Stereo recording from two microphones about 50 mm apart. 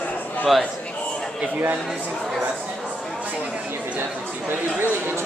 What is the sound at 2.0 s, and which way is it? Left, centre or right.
Speech, centre.